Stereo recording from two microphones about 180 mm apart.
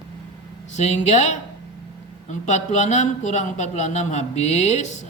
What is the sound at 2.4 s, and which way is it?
A man's voice, 40° left (ahead or behind).